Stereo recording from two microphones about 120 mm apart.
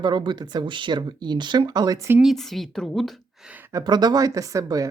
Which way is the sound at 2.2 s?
Centre (ahead or behind).